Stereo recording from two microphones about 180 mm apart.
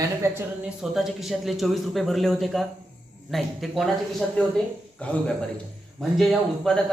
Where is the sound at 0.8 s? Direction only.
Centre (ahead or behind).